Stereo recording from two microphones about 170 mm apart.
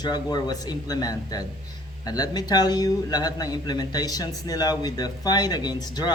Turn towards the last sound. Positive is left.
turn(degrees=25)  # may be behind; listen again after turning